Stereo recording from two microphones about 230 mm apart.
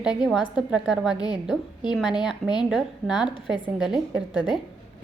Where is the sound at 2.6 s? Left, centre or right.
Centre.